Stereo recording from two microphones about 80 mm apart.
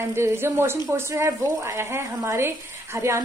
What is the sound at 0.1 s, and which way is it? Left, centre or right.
A woman's voice, right.